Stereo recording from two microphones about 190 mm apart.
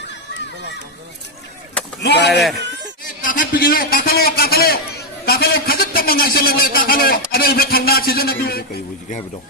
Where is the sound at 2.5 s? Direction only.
65° right (ahead or behind).